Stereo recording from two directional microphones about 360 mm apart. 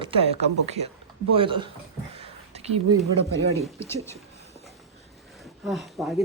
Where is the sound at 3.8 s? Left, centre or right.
Centre.